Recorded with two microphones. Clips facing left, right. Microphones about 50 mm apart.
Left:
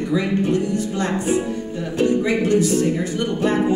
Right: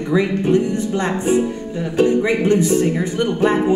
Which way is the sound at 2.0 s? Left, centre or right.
Right.